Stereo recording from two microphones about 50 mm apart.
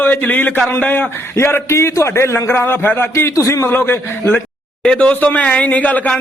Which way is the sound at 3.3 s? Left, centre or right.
Left.